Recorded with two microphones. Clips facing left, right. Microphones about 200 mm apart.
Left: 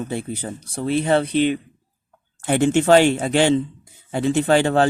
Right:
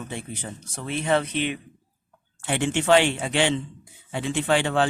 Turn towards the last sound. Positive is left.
turn(degrees=40)  # may be behind; listen again after turning